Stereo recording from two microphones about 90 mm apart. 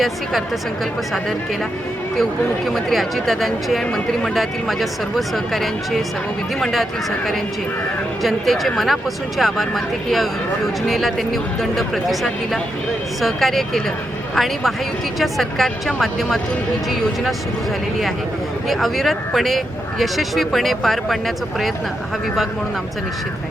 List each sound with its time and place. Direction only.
2.6 s speech: centre (ahead or behind)
8.2 s speech: centre (ahead or behind)
18.7 s speech: centre (ahead or behind)